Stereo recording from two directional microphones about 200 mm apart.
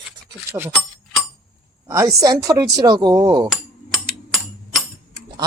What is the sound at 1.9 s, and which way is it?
Speech, 15° right (ahead or behind).